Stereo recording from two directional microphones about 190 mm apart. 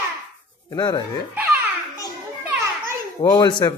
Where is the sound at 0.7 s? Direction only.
20° left (ahead or behind).